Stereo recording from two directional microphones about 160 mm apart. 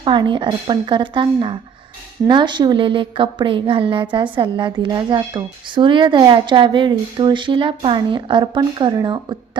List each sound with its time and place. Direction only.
0.0 s a woman's voice: 30° right (ahead or behind)